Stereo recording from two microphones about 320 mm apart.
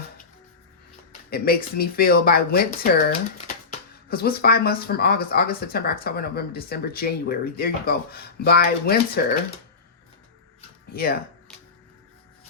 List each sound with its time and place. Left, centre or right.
1.3 s speech: left
10.9 s speech: left